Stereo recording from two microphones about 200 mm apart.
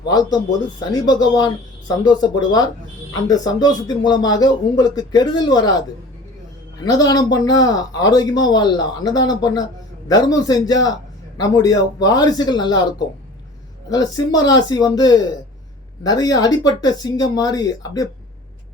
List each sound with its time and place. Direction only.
0.0 s speech: 20° left (ahead or behind)
6.8 s speech: 20° left (ahead or behind)
13.9 s speech: 20° left (ahead or behind)